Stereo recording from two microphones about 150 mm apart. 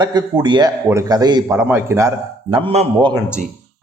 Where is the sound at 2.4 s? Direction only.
35° right (ahead or behind).